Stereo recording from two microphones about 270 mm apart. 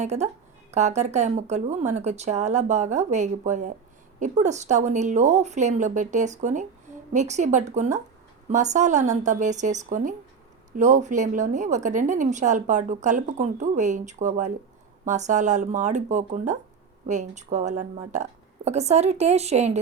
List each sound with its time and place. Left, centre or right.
0.0 s a woman's voice: right